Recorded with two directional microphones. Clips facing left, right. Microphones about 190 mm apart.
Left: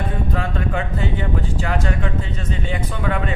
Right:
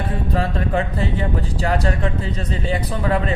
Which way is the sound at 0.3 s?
35° right (ahead or behind).